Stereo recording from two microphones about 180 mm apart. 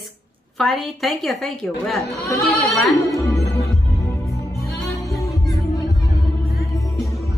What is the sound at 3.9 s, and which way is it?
Music, 20° left (ahead or behind).